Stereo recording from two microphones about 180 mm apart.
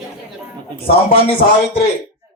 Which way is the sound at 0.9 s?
30° left (ahead or behind).